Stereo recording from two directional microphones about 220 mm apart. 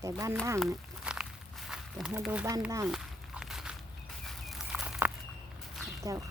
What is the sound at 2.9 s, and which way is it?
Walk, centre (ahead or behind).